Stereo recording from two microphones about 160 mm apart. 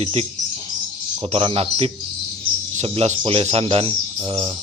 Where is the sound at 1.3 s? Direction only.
35° right (ahead or behind).